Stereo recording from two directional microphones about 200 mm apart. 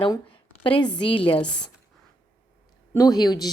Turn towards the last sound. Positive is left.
turn(degrees=20)  # may be behind; listen again after turning